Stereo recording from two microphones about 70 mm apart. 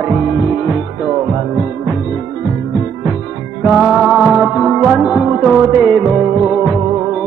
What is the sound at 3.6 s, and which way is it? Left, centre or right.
Music, centre.